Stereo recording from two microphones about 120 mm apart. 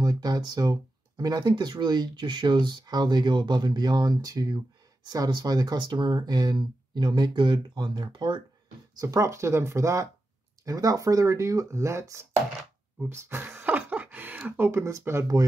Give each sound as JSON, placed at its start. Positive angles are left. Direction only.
{"t": 0.0, "sound": "speech", "side_deg": -35}
{"t": 8.9, "sound": "speech", "side_deg": -25}